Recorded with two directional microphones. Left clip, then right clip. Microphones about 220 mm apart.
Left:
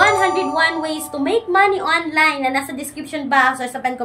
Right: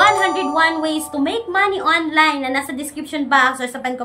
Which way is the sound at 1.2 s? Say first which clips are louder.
Left 3 dB; 5° right (ahead or behind).